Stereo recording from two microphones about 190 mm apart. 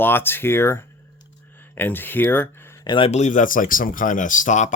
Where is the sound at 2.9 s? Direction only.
30° left (ahead or behind).